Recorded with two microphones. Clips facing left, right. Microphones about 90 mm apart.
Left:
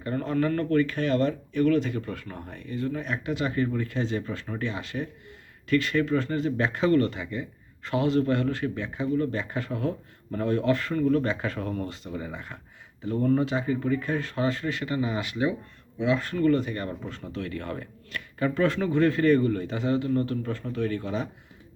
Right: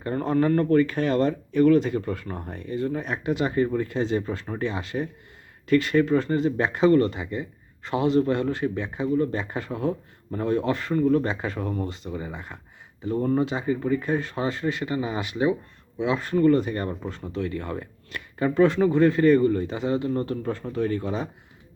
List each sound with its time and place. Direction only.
0.0 s speech: 30° right (ahead or behind)
17.3 s speech: 15° right (ahead or behind)